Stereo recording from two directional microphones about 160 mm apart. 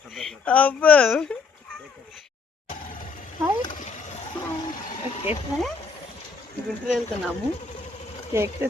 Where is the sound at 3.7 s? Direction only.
55° left (ahead or behind).